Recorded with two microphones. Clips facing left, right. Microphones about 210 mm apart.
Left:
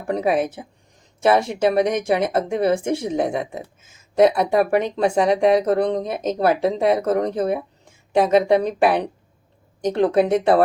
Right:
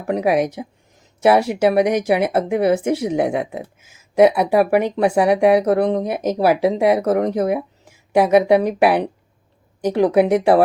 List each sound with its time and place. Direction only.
0.1 s speech: 10° right (ahead or behind)